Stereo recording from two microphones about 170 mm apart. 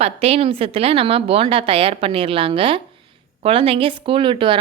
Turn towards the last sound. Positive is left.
turn(degrees=-30)  # may be behind; listen again after turning